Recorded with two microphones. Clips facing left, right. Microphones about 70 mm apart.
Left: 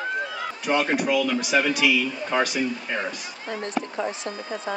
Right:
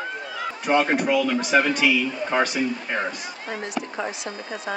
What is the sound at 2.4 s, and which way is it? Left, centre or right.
Speech, right.